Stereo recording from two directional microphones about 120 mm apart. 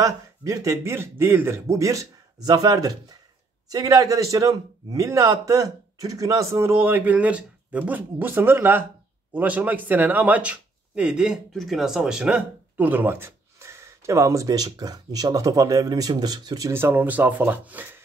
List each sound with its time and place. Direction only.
0.0 s speech: 30° right (ahead or behind)
16.7 s speech: 15° right (ahead or behind)